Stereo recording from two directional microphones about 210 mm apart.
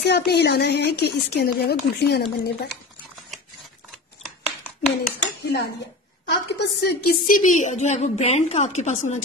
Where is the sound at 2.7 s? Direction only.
Centre (ahead or behind).